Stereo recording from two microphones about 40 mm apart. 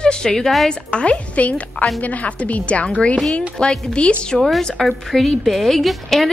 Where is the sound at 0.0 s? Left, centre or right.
Centre.